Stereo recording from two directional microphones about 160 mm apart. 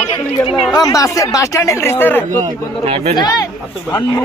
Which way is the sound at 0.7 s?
20° left (ahead or behind).